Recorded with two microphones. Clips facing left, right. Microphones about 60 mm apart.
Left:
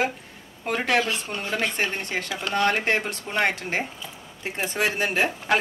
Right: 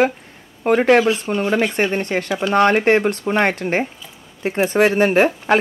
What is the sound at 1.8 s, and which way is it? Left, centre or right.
Speech, right.